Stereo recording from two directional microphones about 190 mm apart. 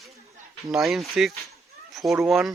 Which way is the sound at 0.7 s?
Centre (ahead or behind).